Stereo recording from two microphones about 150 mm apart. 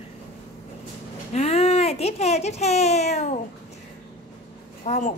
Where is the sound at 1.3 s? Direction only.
45° left (ahead or behind).